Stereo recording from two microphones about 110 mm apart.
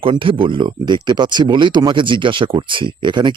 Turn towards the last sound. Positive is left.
turn(degrees=-45)  # may be behind; listen again after turning